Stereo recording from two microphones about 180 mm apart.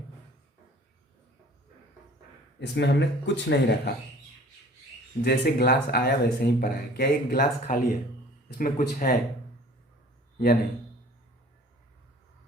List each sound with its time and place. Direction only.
2.6 s speech: 75° left (ahead or behind)
5.2 s speech: 60° left (ahead or behind)
10.3 s a man's voice: 60° left (ahead or behind)